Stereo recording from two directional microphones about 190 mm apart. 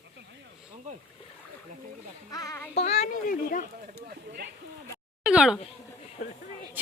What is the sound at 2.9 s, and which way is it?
Speech, 40° left (ahead or behind).